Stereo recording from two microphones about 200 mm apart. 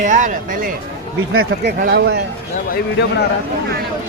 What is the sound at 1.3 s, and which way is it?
Speech, 60° right (ahead or behind).